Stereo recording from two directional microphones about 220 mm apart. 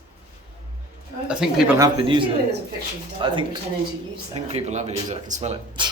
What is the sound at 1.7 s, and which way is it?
Speech, 20° right (ahead or behind).